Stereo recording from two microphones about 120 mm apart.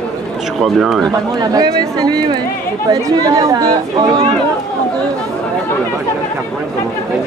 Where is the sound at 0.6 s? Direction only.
Centre (ahead or behind).